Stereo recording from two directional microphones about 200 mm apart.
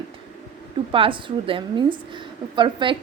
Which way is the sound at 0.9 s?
25° right (ahead or behind).